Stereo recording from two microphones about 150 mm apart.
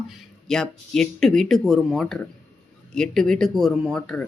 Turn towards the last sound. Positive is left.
turn(degrees=5)  # may be behind; listen again after turning